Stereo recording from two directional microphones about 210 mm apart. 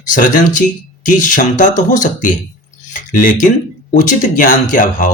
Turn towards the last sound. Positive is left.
turn(degrees=40)  # may be behind; listen again after turning